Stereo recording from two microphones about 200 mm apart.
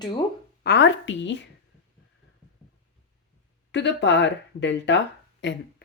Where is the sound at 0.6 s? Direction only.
60° left (ahead or behind).